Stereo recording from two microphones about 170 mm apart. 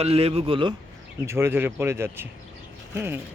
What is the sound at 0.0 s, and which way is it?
Speech, 35° right (ahead or behind).